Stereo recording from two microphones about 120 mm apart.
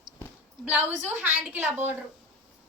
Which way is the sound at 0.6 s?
15° right (ahead or behind).